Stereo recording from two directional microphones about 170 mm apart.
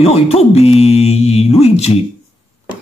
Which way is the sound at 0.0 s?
35° left (ahead or behind).